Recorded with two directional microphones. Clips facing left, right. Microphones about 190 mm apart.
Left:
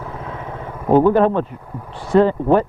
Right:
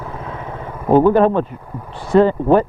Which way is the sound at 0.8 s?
30° right (ahead or behind).